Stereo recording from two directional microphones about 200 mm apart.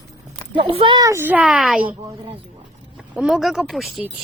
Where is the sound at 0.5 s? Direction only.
25° right (ahead or behind); by 1.8 s 5° right (ahead or behind).